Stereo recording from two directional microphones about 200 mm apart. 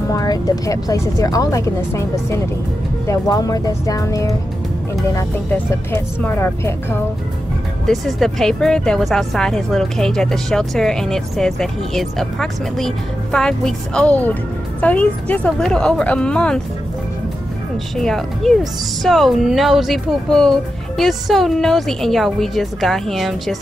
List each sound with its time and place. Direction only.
0.1 s speech: 15° left (ahead or behind)
7.8 s a woman's voice: centre (ahead or behind)
17.9 s a woman's voice: centre (ahead or behind)